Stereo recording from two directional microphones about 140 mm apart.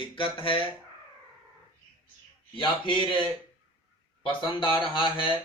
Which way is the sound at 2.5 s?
35° left (ahead or behind).